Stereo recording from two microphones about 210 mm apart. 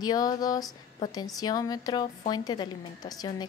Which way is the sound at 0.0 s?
20° left (ahead or behind).